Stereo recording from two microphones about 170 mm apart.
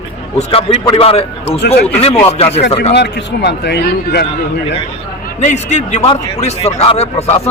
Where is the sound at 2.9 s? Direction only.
80° left.